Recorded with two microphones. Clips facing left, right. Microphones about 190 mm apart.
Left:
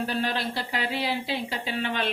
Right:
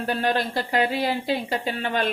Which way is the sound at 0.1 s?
50° right (ahead or behind).